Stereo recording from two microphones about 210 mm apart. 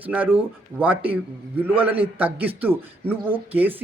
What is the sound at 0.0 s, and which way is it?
A man's voice, 5° right (ahead or behind).